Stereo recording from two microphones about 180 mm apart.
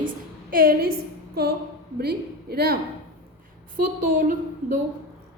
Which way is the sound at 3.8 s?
50° right (ahead or behind).